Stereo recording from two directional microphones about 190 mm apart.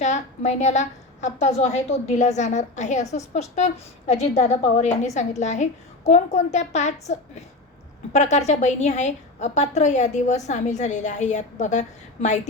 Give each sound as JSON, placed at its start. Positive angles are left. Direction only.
{"t": 0.0, "sound": "a woman's voice", "side_deg": 40}